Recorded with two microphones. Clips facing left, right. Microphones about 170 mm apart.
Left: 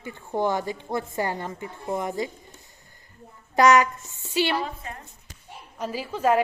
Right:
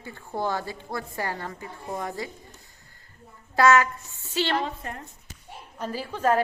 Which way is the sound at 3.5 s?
20° left (ahead or behind).